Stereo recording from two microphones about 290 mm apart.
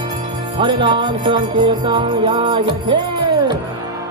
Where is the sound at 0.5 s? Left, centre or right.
Centre.